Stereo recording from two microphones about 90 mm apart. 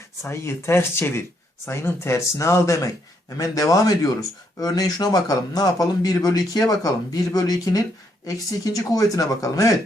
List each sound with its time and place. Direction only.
0.2 s a man's voice: 30° left (ahead or behind)